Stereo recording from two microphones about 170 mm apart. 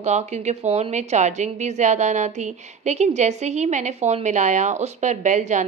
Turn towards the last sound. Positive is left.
turn(degrees=-45)  # may be behind; listen again after turning